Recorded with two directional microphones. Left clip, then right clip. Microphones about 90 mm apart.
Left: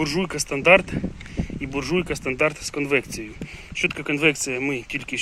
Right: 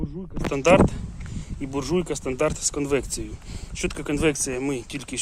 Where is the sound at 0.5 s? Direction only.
10° right (ahead or behind).